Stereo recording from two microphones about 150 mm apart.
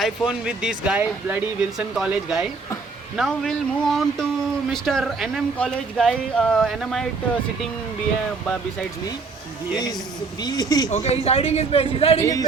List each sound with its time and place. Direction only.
0.0 s speech: 5° right (ahead or behind)
10.4 s speech: 25° left (ahead or behind)
10.8 s a man's voice: 45° left (ahead or behind)
12.2 s speech: 25° left (ahead or behind)